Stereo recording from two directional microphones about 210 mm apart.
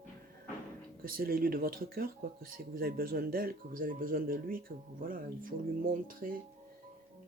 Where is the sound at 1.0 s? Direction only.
45° right (ahead or behind).